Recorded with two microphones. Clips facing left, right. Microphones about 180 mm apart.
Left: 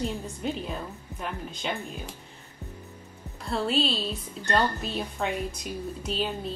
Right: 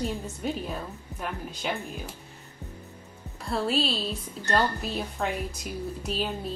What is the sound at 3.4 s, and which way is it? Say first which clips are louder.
Speech: even; centre (ahead or behind).